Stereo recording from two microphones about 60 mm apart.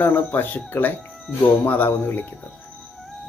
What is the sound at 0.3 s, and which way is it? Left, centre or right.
Speech, left.